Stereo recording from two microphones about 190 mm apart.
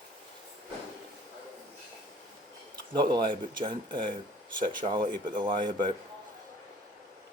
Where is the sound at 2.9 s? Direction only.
25° right (ahead or behind).